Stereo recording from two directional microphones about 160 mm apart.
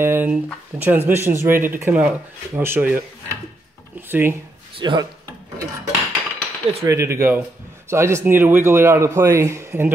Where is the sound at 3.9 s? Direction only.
15° right (ahead or behind).